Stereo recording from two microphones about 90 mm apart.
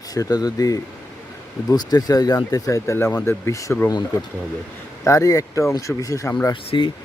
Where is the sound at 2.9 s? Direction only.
25° left (ahead or behind).